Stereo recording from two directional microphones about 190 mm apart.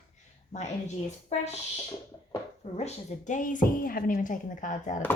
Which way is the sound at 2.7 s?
35° left (ahead or behind).